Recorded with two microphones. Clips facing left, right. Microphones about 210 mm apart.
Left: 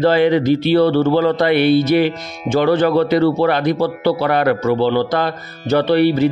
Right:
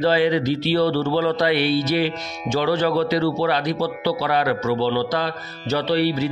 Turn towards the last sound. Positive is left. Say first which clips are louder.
# left 7 dB
turn(degrees=55)  # may be behind; listen again after turning